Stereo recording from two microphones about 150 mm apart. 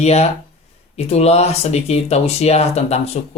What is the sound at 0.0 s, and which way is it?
Speech, 45° left (ahead or behind).